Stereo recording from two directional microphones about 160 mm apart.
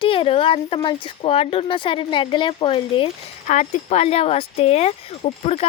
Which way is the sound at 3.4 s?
50° left (ahead or behind).